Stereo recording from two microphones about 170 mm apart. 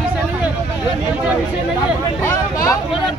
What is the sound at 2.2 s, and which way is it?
Speech, 20° left (ahead or behind).